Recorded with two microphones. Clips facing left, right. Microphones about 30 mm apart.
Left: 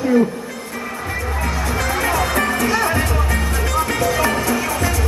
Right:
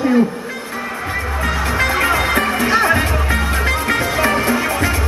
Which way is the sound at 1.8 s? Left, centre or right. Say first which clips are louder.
Right 3 dB; right.